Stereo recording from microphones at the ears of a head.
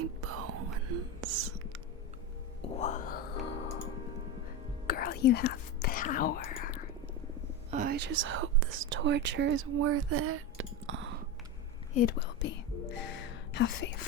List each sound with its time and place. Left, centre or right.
0.0 s whispering: right
2.6 s whispering: left
4.9 s whispering: left
7.7 s speech: right
11.9 s whispering: left